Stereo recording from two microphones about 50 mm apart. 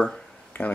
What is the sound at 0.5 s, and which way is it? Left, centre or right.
Speech, left.